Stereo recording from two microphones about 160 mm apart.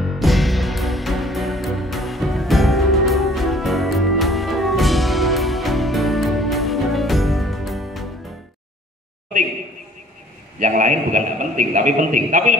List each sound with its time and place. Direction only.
0.0 s music: centre (ahead or behind)
10.6 s a man's voice: 55° right (ahead or behind)